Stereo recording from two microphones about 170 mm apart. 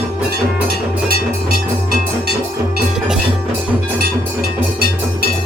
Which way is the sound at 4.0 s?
65° right (ahead or behind).